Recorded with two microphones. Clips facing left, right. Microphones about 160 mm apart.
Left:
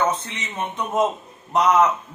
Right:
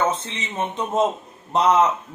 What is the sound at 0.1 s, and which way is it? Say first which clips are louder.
A man's voice: even; 30° right (ahead or behind).